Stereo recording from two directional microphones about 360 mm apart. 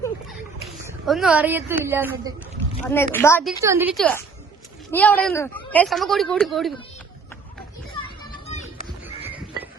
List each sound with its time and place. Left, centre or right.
0.6 s speech: centre
2.8 s a woman's voice: centre
3.6 s speech: centre
8.2 s children playing: centre
9.0 s a sound: centre